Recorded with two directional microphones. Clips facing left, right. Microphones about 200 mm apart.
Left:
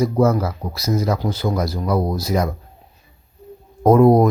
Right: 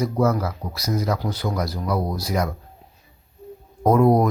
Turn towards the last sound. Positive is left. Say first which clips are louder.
# left 5 dB
turn(degrees=25)  # may be behind; listen again after turning